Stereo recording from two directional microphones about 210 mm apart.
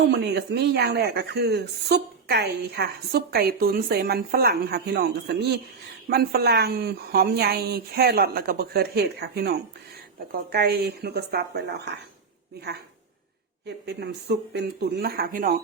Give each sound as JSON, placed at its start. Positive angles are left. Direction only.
{"t": 0.1, "sound": "a woman's voice", "side_deg": -55}
{"t": 13.7, "sound": "a woman's voice", "side_deg": -50}